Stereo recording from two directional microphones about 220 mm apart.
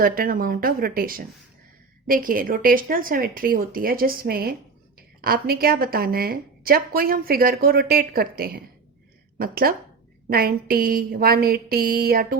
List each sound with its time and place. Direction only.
0.0 s a woman's voice: 40° right (ahead or behind)